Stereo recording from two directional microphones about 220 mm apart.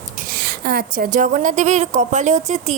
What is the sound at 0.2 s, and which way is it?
A woman's voice, 40° right (ahead or behind).